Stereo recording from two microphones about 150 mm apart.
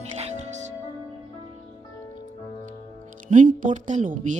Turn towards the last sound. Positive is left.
turn(degrees=-55)  # may be behind; listen again after turning